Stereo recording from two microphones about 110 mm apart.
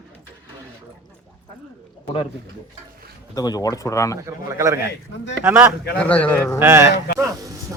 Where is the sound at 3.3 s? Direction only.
35° left (ahead or behind).